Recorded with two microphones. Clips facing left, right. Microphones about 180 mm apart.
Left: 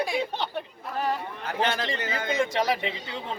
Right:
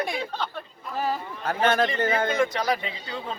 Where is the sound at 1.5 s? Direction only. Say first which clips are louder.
Right 5 dB; 50° right (ahead or behind).